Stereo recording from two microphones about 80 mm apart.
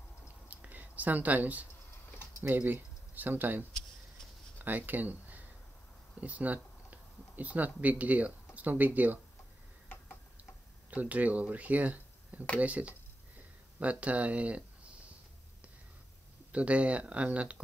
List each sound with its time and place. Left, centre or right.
0.5 s a sound: centre
2.4 s speech: right
10.9 s speech: centre
16.5 s speech: centre